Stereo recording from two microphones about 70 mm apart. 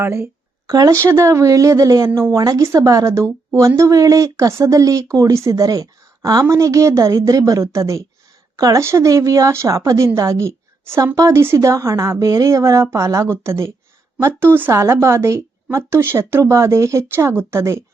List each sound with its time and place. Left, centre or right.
0.0 s a woman's voice: right
0.7 s speech: right
2.0 s a woman's voice: right
2.3 s speech: right
6.4 s speech: right
8.8 s a woman's voice: right
14.7 s a woman's voice: right